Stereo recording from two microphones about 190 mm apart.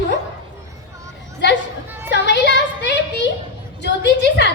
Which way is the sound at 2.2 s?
65° left (ahead or behind).